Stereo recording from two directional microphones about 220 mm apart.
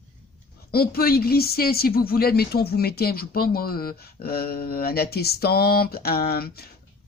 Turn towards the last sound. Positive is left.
turn(degrees=45)  # may be behind; listen again after turning